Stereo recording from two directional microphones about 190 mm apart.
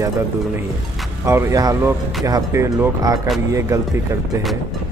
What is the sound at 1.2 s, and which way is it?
Speech, 15° right (ahead or behind).